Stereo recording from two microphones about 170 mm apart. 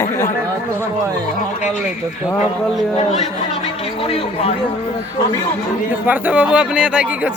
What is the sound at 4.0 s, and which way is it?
Speech, 35° left (ahead or behind).